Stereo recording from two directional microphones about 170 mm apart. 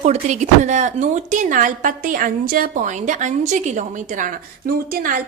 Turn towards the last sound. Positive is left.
turn(degrees=-60)  # may be behind; listen again after turning